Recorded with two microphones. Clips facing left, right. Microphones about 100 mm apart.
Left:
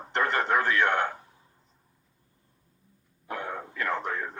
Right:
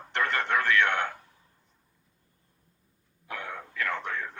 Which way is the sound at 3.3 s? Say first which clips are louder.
Left 3 dB; 10° left (ahead or behind).